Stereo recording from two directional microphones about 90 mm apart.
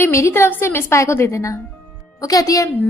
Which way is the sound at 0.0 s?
30° left (ahead or behind).